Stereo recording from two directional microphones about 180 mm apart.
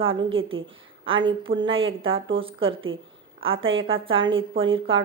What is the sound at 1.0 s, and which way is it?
A woman's voice, 30° right (ahead or behind).